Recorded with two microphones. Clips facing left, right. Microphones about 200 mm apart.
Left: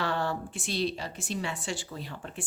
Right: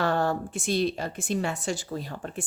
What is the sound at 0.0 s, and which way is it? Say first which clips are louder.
A woman's voice: right 5 dB; 45° right (ahead or behind).